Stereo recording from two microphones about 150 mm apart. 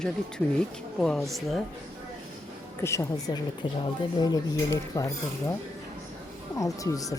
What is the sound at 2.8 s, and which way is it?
Speech, 20° left (ahead or behind).